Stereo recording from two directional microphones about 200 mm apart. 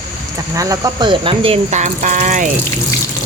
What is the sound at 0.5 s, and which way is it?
Speech, 15° right (ahead or behind).